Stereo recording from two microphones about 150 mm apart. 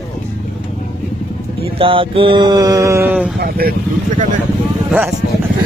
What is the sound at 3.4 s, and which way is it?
Speech, 90° right.